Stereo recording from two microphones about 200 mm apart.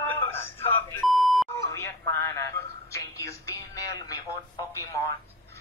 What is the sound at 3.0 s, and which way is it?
Music, 15° left (ahead or behind).